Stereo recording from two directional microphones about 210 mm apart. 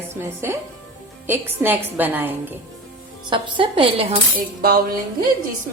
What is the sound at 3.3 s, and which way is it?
Speech, 25° right (ahead or behind).